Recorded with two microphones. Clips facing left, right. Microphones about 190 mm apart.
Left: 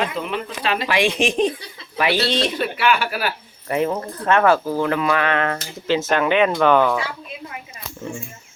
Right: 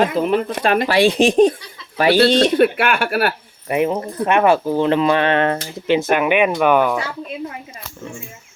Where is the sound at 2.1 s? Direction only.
50° right (ahead or behind).